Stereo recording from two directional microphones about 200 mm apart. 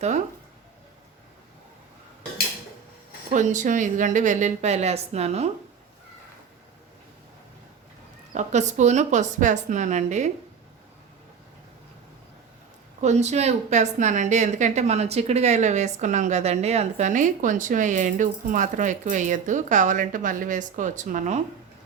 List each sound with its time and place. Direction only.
3.3 s a woman's voice: 40° right (ahead or behind)
8.3 s a woman's voice: 35° right (ahead or behind)
13.0 s a woman's voice: 35° right (ahead or behind)